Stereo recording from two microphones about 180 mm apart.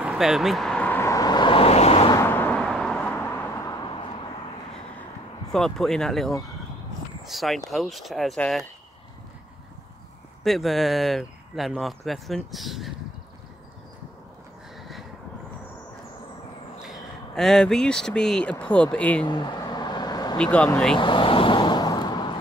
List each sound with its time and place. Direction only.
0.0 s vehicle: 5° right (ahead or behind); by 2.1 s 35° left (ahead or behind)
2.1 s vehicle: 10° left (ahead or behind); by 4.1 s 25° left (ahead or behind)
5.5 s speech: centre (ahead or behind)
10.4 s speech: centre (ahead or behind)
14.8 s a sound: centre (ahead or behind)
16.8 s speech: centre (ahead or behind)
19.2 s vehicle: 25° left (ahead or behind)
20.3 s speech: 5° left (ahead or behind)
21.0 s vehicle: 25° left (ahead or behind)